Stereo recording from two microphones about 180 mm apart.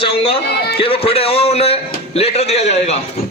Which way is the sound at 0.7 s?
30° left (ahead or behind).